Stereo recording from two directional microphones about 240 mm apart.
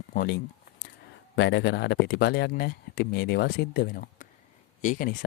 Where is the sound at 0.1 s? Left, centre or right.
Left.